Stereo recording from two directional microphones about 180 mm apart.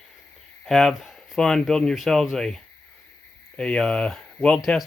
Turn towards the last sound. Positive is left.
turn(degrees=5)  # may be behind; listen again after turning